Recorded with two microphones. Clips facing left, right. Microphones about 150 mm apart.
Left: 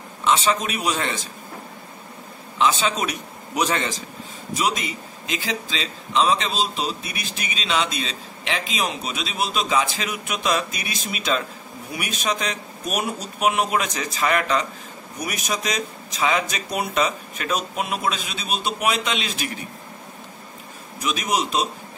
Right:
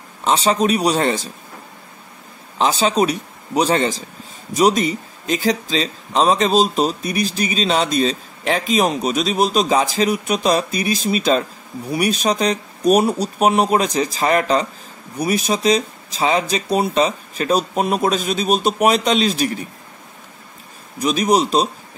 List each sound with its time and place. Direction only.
0.2 s speech: 35° right (ahead or behind)
2.6 s speech: 35° right (ahead or behind)
21.0 s speech: 35° right (ahead or behind)